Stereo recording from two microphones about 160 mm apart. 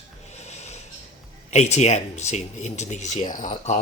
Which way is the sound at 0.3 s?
45° left (ahead or behind).